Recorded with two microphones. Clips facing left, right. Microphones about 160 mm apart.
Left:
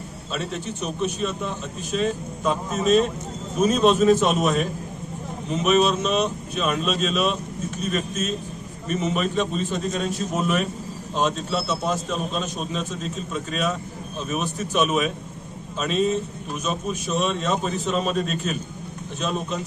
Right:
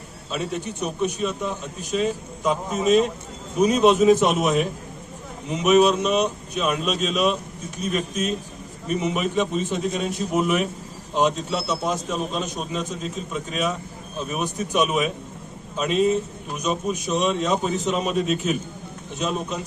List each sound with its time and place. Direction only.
0.3 s a man's voice: 10° right (ahead or behind)